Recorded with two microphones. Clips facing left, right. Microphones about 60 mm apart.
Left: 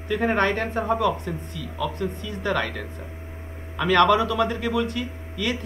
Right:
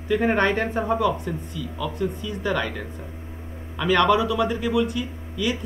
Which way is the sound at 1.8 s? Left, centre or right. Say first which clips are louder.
Even; left.